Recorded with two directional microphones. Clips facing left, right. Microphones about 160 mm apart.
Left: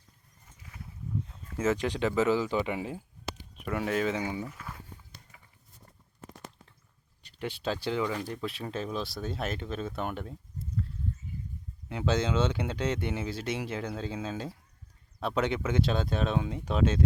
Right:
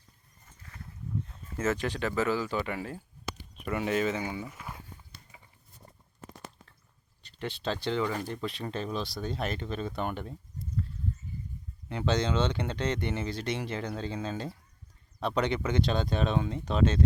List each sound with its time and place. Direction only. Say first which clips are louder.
0.6 s a sound: left 1 dB; 10° left (ahead or behind)
1.3 s speech: left 2 dB; 10° left (ahead or behind)
3.6 s speech: right 1 dB; centre (ahead or behind)
4.1 s speech: left 1 dB; 15° left (ahead or behind)
4.4 s walk: even; 15° right (ahead or behind)
7.2 s speech: left 1 dB; 10° left (ahead or behind)
11.9 s speech: even; 5° left (ahead or behind)